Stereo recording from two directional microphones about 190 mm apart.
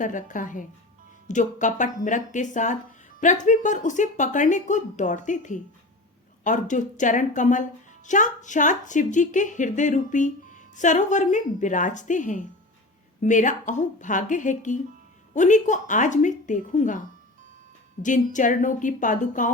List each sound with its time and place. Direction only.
0.0 s a woman's voice: 45° left (ahead or behind)
18.0 s speech: 40° left (ahead or behind)